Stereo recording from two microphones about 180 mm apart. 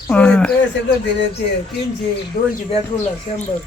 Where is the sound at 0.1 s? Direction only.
10° left (ahead or behind).